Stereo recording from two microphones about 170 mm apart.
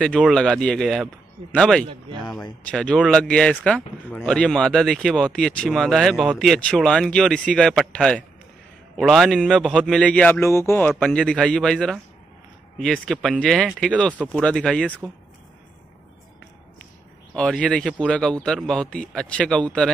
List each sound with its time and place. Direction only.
0.0 s speech: 5° left (ahead or behind)
2.2 s speech: 25° left (ahead or behind)
2.6 s speech: 5° left (ahead or behind)
17.3 s speech: 5° left (ahead or behind)